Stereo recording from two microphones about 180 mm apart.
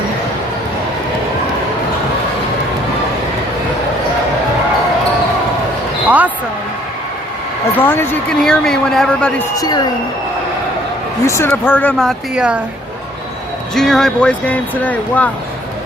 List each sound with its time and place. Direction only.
6.1 s basketball bounce: 10° right (ahead or behind)
7.8 s speech: 10° left (ahead or behind)
9.6 s speech: 20° left (ahead or behind)
11.3 s speech: 10° left (ahead or behind); by 12.5 s 5° right (ahead or behind)
13.7 s speech: centre (ahead or behind)